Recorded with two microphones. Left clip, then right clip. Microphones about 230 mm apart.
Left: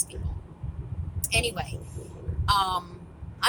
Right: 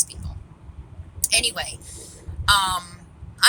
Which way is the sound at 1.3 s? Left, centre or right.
Centre.